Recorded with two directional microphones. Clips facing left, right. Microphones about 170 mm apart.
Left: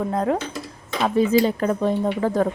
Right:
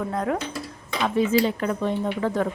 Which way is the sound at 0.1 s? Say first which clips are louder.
Left 3 dB; 30° left (ahead or behind).